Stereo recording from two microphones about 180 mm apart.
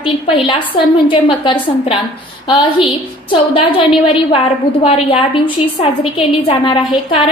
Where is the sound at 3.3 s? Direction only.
30° left (ahead or behind).